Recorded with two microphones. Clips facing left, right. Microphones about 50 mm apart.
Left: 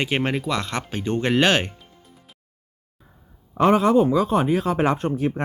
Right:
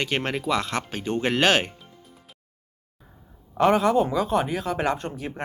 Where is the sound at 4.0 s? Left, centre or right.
Centre.